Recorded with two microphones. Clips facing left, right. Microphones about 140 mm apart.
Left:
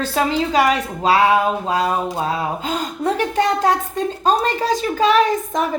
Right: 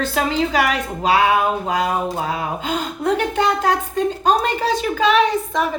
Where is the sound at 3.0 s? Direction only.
40° left (ahead or behind).